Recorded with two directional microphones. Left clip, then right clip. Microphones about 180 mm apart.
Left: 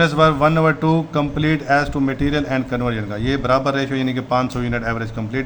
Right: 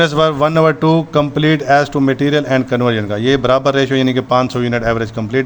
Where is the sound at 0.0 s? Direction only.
45° right (ahead or behind).